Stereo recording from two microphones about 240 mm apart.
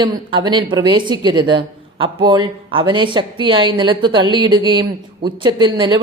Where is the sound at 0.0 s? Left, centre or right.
Centre.